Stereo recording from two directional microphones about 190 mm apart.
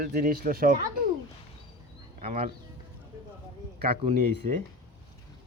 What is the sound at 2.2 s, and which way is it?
Speech, 40° right (ahead or behind).